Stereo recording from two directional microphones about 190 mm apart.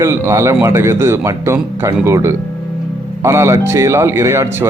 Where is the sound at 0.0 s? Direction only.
15° right (ahead or behind).